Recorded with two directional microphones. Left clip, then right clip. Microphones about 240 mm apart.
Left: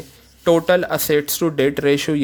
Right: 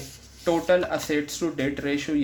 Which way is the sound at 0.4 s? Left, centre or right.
Left.